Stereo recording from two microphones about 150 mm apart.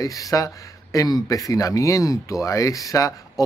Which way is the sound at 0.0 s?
20° left (ahead or behind).